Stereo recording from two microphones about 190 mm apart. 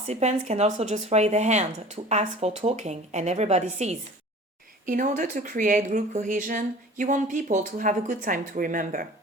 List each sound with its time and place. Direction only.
0.0 s speech: 35° right (ahead or behind)